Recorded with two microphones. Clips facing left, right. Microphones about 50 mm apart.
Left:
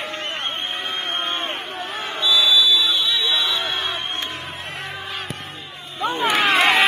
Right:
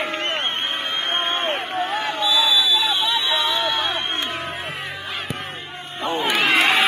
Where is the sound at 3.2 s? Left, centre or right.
Right.